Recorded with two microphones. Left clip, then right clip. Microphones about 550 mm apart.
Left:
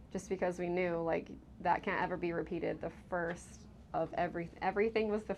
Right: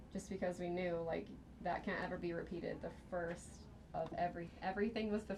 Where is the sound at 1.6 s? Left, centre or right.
Left.